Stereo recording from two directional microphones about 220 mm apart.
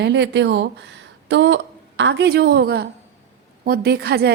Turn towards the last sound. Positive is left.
turn(degrees=-45)  # may be behind; listen again after turning